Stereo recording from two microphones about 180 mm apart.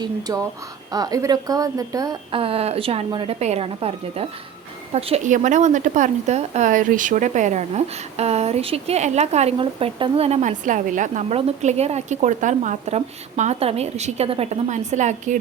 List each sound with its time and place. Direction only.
0.9 s a woman's voice: 20° right (ahead or behind); by 15.4 s 40° right (ahead or behind)